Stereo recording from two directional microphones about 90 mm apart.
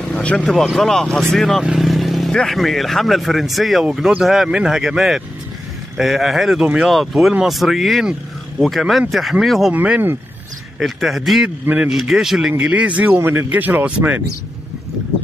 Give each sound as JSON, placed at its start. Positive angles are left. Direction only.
{"t": 0.0, "sound": "vehicle", "side_deg": 15}
{"t": 0.7, "sound": "speech", "side_deg": 5}
{"t": 9.7, "sound": "speech", "side_deg": -15}
{"t": 10.8, "sound": "speech", "side_deg": -5}
{"t": 11.6, "sound": "speech", "side_deg": -15}
{"t": 11.9, "sound": "speech", "side_deg": -5}